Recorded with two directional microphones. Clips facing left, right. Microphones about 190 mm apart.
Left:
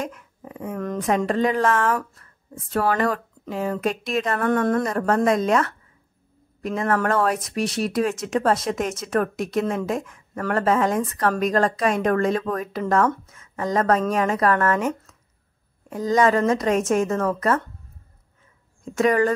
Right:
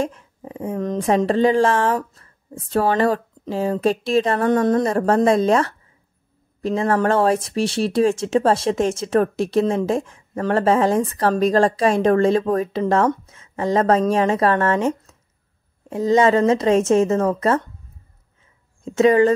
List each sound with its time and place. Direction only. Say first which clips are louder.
0.0 s speech: right 6 dB; 30° right (ahead or behind)
18.9 s speech: right 5 dB; 25° right (ahead or behind)